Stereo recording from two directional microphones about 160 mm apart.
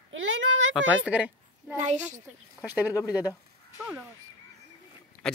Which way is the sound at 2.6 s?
10° right (ahead or behind).